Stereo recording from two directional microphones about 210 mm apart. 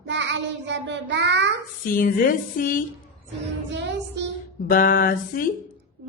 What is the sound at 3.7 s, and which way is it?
Child singing, 55° right (ahead or behind).